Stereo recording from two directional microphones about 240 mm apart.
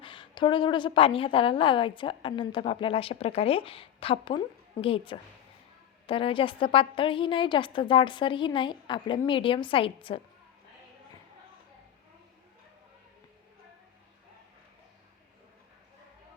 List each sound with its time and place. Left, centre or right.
0.0 s a woman's voice: centre